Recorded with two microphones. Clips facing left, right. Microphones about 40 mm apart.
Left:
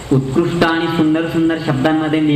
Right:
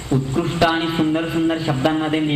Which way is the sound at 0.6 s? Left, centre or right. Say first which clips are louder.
Left 1 dB; centre.